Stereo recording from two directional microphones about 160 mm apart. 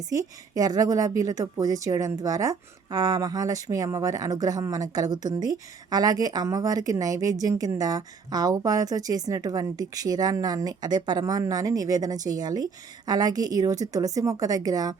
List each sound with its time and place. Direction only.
0.1 s speech: 20° right (ahead or behind)